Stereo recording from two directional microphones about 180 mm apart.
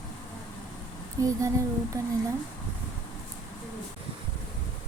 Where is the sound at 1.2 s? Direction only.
20° right (ahead or behind).